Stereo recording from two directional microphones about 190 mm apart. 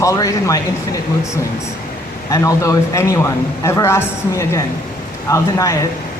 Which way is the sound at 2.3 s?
15° left (ahead or behind).